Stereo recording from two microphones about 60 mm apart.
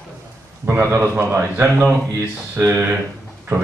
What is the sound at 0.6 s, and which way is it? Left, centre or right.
A man's voice, right.